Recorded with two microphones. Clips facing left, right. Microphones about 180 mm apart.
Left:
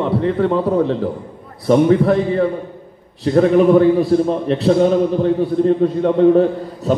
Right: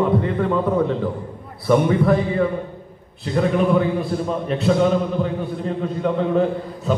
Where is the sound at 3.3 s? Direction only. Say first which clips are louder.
Left 7 dB; 40° left (ahead or behind).